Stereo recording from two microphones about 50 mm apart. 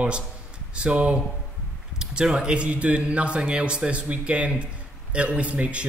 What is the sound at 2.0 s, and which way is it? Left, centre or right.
A man's voice, centre.